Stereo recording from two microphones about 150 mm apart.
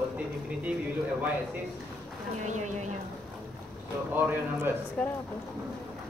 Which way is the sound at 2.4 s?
55° right (ahead or behind).